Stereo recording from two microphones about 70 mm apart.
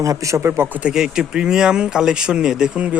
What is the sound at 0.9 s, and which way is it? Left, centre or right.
Speech, centre.